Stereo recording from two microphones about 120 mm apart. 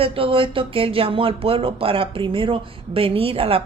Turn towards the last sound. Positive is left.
turn(degrees=-50)  # may be behind; listen again after turning